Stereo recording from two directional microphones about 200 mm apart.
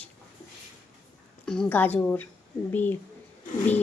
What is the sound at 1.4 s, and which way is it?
A woman's voice, 5° left (ahead or behind).